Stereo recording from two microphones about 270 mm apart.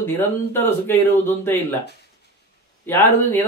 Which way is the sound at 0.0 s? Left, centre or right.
Centre.